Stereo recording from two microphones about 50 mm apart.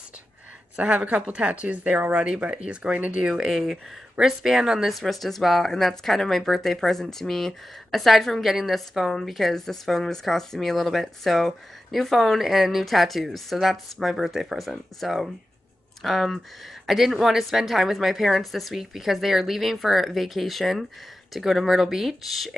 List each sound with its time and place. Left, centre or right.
0.7 s speech: right; by 4.9 s centre
4.9 s speech: centre